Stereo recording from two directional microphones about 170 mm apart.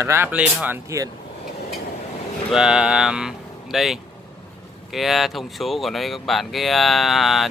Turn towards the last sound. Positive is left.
turn(degrees=0)  # may be behind; listen again after turning